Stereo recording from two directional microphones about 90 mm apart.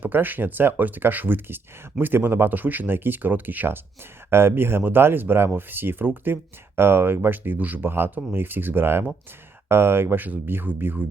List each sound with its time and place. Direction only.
0.0 s speech: 20° right (ahead or behind)